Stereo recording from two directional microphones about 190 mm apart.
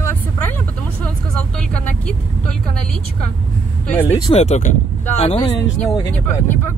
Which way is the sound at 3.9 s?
10° left (ahead or behind).